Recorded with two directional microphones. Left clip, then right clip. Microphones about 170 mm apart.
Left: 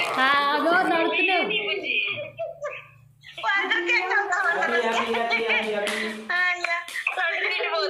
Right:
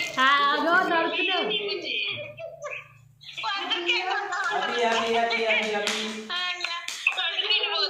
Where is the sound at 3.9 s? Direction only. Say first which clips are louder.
Left 2 dB; 25° left (ahead or behind).